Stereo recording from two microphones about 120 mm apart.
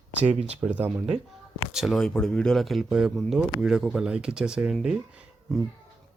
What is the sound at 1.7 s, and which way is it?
Speech, centre (ahead or behind).